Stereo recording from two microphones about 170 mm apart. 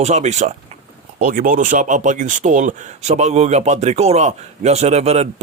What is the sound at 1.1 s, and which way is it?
A man's voice, 55° right (ahead or behind).